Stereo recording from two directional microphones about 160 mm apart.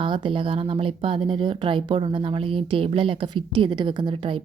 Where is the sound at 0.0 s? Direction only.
30° right (ahead or behind).